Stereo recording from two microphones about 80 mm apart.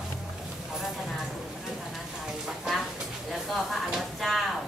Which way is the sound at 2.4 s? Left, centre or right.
Centre.